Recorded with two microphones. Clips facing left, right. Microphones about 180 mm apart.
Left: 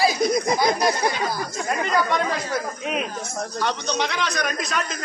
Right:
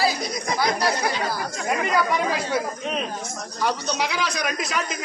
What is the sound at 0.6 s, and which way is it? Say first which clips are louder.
Speech: left 2 dB; 20° left (ahead or behind).